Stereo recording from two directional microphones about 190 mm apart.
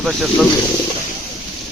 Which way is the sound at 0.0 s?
Centre (ahead or behind).